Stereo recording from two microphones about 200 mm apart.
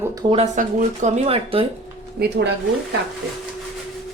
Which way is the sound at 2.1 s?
55° right (ahead or behind).